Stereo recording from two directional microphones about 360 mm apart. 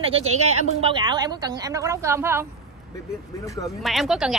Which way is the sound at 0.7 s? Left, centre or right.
Centre.